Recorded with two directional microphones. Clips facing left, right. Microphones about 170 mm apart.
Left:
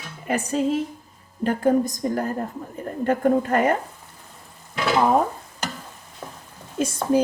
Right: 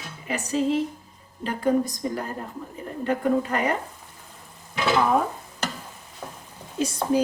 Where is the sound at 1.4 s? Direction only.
50° left (ahead or behind).